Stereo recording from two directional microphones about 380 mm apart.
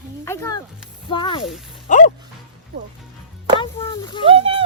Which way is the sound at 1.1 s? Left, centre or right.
Centre.